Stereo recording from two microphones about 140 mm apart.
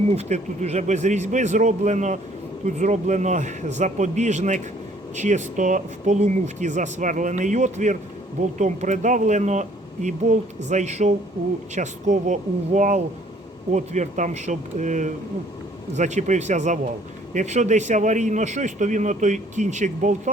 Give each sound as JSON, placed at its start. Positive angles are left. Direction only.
{"t": 0.1, "sound": "a man's voice", "side_deg": -50}